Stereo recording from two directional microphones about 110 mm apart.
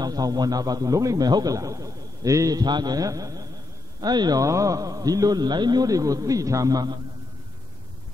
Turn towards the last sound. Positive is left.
turn(degrees=-35)  # may be behind; listen again after turning